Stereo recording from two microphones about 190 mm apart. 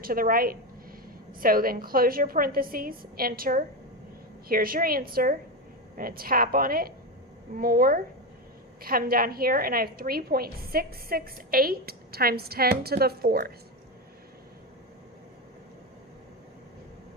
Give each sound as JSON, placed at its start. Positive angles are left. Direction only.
{"t": 0.0, "sound": "a woman's voice", "side_deg": -50}